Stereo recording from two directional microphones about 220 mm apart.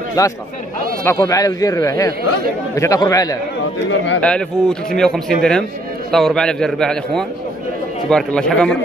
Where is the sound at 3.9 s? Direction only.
55° left (ahead or behind).